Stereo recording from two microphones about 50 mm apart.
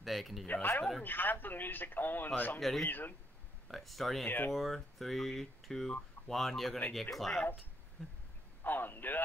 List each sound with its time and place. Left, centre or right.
0.0 s speech: centre
0.5 s a man's voice: left
3.6 s speech: centre
8.0 s a sound: centre
8.6 s a man's voice: left